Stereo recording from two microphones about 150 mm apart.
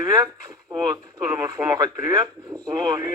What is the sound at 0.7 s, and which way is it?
A man's voice, 25° right (ahead or behind).